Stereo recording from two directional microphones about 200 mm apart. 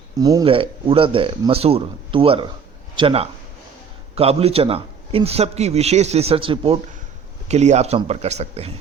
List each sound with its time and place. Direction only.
0.2 s a man's voice: 20° right (ahead or behind)